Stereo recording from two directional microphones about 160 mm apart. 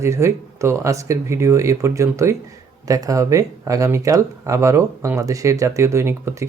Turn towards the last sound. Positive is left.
turn(degrees=-15)  # may be behind; listen again after turning